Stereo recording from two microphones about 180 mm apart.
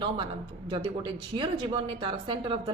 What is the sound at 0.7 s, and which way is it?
Speech, 25° right (ahead or behind).